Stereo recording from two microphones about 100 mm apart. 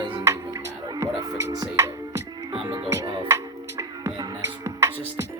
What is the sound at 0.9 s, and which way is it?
Music, 30° right (ahead or behind).